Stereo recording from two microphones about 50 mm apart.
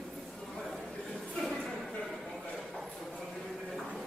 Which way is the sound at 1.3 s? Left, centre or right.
Centre.